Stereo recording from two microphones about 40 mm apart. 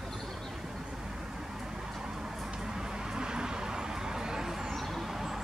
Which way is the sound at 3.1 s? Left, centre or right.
Centre.